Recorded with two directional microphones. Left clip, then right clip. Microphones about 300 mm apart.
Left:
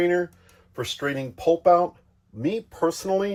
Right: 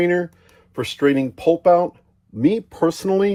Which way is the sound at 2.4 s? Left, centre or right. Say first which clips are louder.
Right 6 dB; right.